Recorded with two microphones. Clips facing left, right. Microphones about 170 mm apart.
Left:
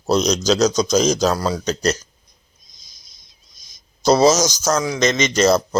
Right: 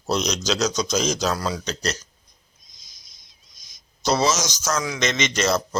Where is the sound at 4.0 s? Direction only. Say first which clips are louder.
Left 8 dB; 40° left (ahead or behind).